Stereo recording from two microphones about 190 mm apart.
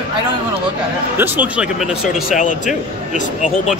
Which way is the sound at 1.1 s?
10° right (ahead or behind).